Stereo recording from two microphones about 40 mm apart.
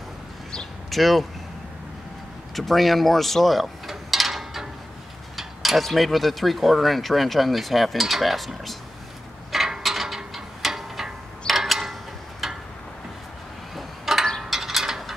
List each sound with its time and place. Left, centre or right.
0.8 s speech: centre
2.5 s a sound: centre
5.9 s speech: centre
9.5 s mechanisms: centre
11.4 s tick-tock: centre
13.7 s a sound: centre